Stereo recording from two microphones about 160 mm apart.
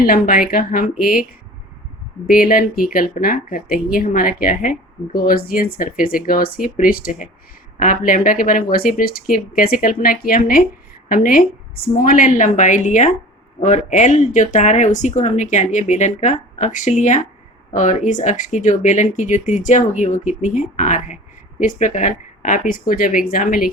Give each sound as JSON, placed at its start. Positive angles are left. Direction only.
{"t": 0.0, "sound": "speech", "side_deg": 65}
{"t": 2.2, "sound": "speech", "side_deg": 60}